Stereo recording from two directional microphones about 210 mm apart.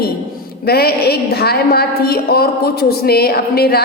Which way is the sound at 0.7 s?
50° left (ahead or behind).